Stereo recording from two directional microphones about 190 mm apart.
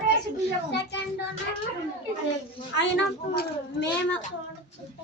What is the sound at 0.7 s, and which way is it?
Speech, 65° left (ahead or behind).